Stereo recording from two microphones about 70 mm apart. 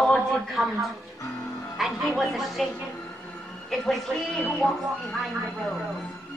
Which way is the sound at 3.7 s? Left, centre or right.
Centre.